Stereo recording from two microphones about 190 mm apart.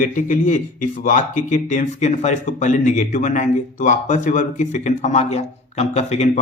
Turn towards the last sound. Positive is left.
turn(degrees=35)  # may be behind; listen again after turning